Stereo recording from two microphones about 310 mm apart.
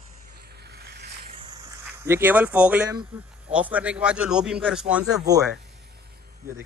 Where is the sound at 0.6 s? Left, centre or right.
Right.